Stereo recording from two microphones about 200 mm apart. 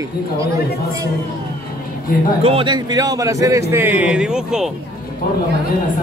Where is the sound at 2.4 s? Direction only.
25° right (ahead or behind); by 4.7 s 5° right (ahead or behind).